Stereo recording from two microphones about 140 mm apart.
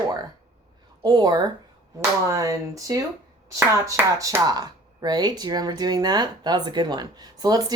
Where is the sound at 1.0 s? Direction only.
30° right (ahead or behind).